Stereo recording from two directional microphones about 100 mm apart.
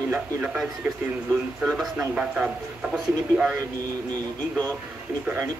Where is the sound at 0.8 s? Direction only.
15° right (ahead or behind).